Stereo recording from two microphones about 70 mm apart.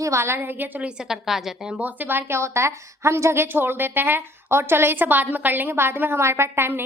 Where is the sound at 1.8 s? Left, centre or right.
Right.